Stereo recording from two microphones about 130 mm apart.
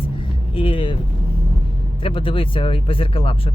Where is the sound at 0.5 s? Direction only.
40° left (ahead or behind).